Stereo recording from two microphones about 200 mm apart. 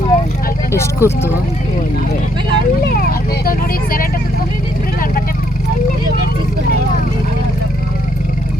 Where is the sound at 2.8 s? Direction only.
45° left (ahead or behind).